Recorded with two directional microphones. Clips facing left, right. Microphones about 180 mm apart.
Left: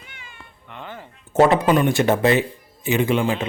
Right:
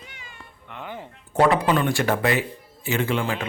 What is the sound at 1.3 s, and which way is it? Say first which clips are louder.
A man's voice: left 4 dB; 25° left (ahead or behind).